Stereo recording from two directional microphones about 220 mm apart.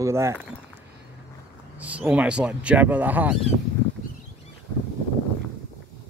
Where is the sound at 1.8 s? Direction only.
5° right (ahead or behind).